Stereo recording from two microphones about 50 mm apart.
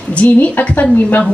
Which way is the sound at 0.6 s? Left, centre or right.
Left.